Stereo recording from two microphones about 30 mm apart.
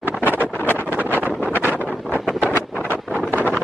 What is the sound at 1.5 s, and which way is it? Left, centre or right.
Wind noise, right.